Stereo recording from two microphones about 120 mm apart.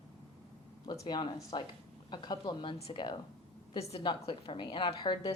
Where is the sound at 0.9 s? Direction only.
35° left (ahead or behind).